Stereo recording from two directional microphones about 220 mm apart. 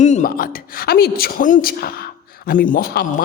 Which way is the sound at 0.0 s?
35° left (ahead or behind).